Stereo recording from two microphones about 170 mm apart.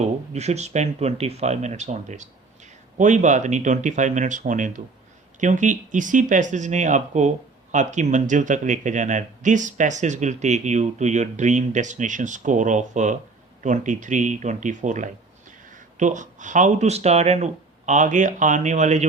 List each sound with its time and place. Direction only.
0.0 s speech: 40° right (ahead or behind)